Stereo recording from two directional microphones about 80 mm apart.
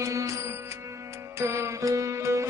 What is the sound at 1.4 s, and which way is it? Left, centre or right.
Music, right.